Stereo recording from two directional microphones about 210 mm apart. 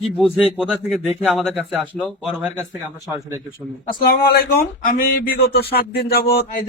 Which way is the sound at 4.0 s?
45° left (ahead or behind).